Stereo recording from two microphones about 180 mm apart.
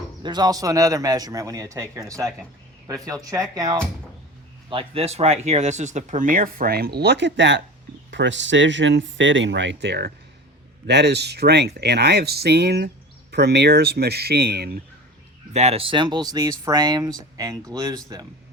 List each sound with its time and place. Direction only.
0.2 s speech: 25° right (ahead or behind)
4.7 s speech: 30° right (ahead or behind); by 14.7 s 60° right (ahead or behind)
15.5 s speech: 35° right (ahead or behind); by 18.0 s 20° right (ahead or behind)